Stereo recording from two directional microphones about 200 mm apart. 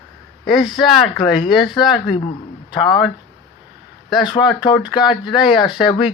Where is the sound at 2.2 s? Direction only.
25° left (ahead or behind).